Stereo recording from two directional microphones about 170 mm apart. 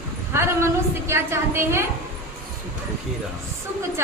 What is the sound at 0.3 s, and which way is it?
A woman's voice, 15° right (ahead or behind).